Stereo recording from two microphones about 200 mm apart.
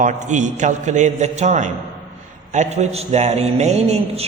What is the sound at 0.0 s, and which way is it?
A man's voice, 40° right (ahead or behind).